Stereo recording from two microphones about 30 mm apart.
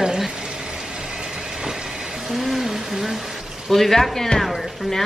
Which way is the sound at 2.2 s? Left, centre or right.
Centre.